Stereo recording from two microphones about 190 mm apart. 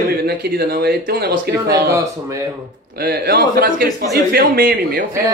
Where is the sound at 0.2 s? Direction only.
50° right (ahead or behind).